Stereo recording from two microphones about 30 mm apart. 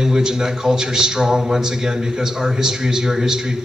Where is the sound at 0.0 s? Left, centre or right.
Centre.